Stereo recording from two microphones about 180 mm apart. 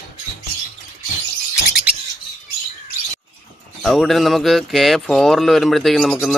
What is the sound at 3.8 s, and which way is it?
Speech, centre (ahead or behind).